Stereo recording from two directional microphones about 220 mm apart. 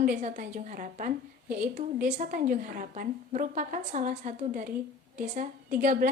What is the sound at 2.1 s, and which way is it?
A woman's voice, 35° right (ahead or behind).